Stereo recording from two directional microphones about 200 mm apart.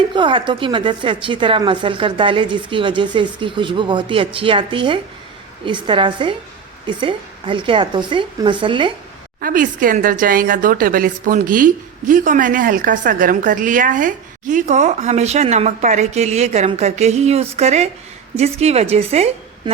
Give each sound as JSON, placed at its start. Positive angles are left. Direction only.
{"t": 0.1, "sound": "a woman's voice", "side_deg": -25}
{"t": 9.4, "sound": "a woman's voice", "side_deg": -45}